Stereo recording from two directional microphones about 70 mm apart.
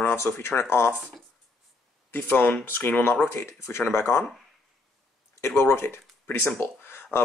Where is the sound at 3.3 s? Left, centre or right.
Left.